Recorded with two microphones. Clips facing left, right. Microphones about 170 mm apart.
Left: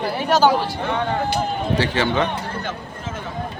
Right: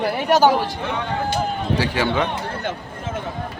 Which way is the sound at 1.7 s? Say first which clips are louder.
Left 1 dB; 10° right (ahead or behind).